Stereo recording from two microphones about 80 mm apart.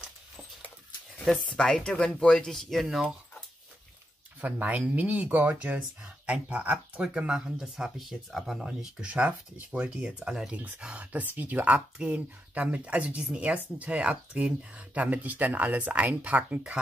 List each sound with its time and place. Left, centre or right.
1.3 s speech: centre
4.4 s speech: centre
8.6 s speech: centre